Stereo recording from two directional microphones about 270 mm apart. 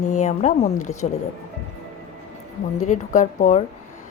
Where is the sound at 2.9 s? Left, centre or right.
Left.